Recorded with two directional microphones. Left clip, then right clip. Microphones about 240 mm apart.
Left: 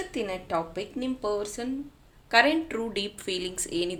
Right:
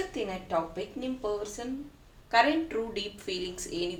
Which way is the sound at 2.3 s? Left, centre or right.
Left.